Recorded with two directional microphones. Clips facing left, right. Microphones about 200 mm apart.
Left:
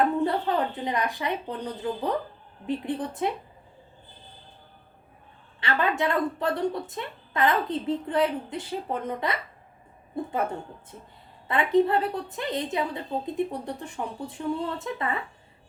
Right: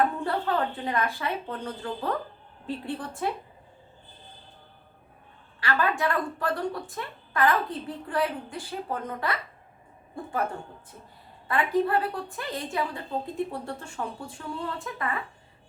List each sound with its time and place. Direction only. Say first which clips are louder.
0.2 s a woman's voice: left 2 dB; 20° left (ahead or behind)
5.5 s a woman's voice: left 1 dB; 25° left (ahead or behind)
11.4 s a woman's voice: left 3 dB; 20° left (ahead or behind)